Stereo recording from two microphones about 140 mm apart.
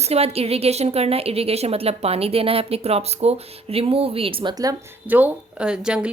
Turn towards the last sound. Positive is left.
turn(degrees=-5)  # may be behind; listen again after turning